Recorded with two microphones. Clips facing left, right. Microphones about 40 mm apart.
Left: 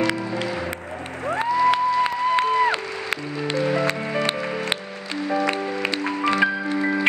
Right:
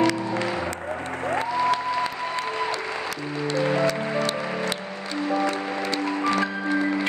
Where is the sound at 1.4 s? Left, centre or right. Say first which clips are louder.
Left 6 dB; left.